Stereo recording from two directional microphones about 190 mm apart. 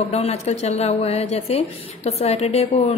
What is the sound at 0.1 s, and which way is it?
A woman's voice, 35° left (ahead or behind).